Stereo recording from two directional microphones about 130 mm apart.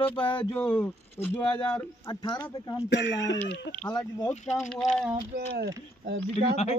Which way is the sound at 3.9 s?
30° left (ahead or behind).